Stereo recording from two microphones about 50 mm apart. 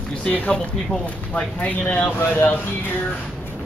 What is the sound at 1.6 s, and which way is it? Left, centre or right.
Speech, left.